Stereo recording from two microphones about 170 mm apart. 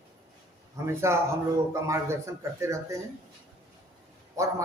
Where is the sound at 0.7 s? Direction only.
15° right (ahead or behind).